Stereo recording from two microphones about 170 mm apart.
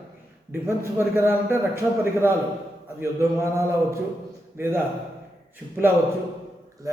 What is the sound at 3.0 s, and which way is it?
A man's voice, 15° right (ahead or behind).